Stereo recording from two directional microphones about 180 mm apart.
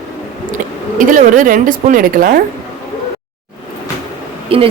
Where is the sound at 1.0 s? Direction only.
45° right (ahead or behind).